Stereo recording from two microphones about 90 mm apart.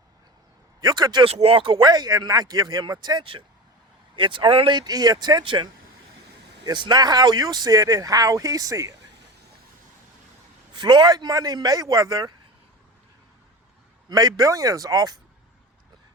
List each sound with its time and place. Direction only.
0.8 s speech: 50° right (ahead or behind)
1.2 s speech: 90° right; by 3.2 s 50° right (ahead or behind)
4.1 s speech: 65° right (ahead or behind)
4.8 s speech: 50° right (ahead or behind)
6.7 s speech: 50° right (ahead or behind); by 9.0 s 35° right (ahead or behind)
10.8 s speech: 55° right (ahead or behind)
14.1 s speech: 45° right (ahead or behind)